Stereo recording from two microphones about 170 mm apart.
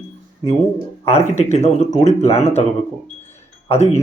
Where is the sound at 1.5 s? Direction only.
40° left (ahead or behind).